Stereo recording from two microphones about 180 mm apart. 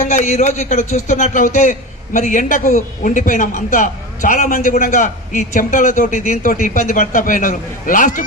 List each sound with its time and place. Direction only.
0.0 s a man's voice: 40° left (ahead or behind)